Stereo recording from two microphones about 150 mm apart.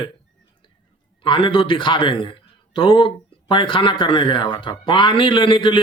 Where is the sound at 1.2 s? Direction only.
35° left (ahead or behind).